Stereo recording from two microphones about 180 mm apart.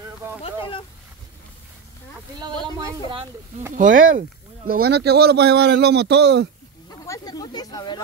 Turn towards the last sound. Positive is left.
turn(degrees=20)  # may be behind; listen again after turning